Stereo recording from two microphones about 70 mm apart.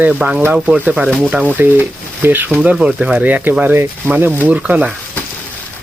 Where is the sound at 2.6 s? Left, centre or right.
Centre; by 4.4 s right.